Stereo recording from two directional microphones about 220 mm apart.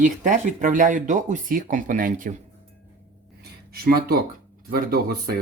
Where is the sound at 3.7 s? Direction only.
45° right (ahead or behind).